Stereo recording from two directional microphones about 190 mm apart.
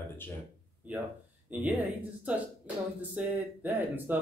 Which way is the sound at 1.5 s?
10° right (ahead or behind).